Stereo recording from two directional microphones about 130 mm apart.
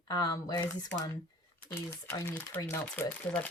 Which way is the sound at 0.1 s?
30° left (ahead or behind).